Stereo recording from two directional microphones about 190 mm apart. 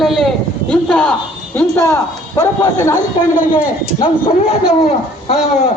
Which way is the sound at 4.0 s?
30° left (ahead or behind).